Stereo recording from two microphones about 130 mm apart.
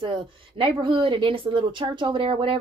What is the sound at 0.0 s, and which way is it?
A woman's voice, 40° right (ahead or behind).